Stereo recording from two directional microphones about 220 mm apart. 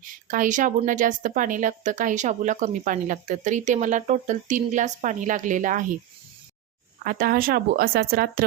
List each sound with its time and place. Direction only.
0.0 s a woman's voice: 35° right (ahead or behind)
7.0 s a woman's voice: 40° right (ahead or behind)